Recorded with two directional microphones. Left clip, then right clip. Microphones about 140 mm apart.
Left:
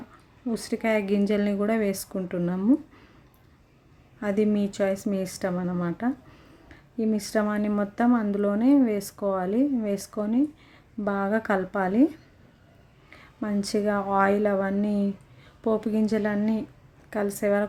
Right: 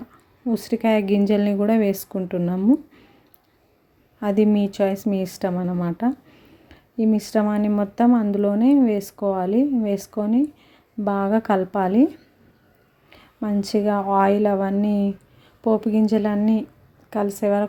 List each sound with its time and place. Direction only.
0.4 s a woman's voice: 20° right (ahead or behind)
4.2 s speech: 20° right (ahead or behind)